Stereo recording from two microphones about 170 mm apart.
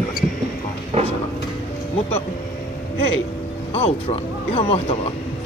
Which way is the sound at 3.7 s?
40° left (ahead or behind).